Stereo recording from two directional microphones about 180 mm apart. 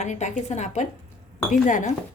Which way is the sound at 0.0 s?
40° left (ahead or behind).